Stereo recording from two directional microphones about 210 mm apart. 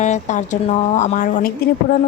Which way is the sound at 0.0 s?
35° left (ahead or behind).